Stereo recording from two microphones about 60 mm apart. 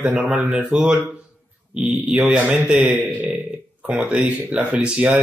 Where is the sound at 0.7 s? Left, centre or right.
Centre.